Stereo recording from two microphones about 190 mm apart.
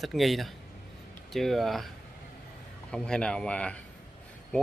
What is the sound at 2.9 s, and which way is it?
Speech, 5° left (ahead or behind).